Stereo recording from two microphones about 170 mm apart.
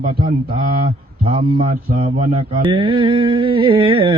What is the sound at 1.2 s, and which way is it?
Mantra, 35° right (ahead or behind).